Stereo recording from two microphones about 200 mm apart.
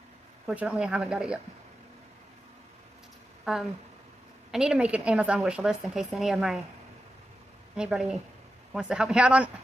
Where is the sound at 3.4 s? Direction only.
Centre (ahead or behind).